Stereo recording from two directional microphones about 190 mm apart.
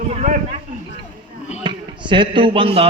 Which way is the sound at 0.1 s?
35° right (ahead or behind).